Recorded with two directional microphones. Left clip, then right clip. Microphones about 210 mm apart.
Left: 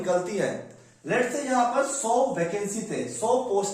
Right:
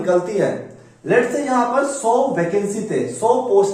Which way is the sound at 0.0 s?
25° left (ahead or behind).